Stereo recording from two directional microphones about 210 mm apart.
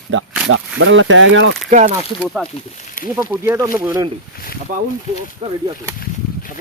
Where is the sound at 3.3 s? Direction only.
10° right (ahead or behind).